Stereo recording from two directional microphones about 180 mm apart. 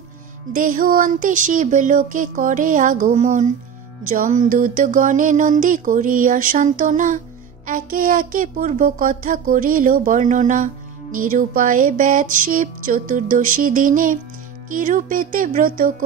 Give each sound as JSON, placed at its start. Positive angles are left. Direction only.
{"t": 0.5, "sound": "speech", "side_deg": -50}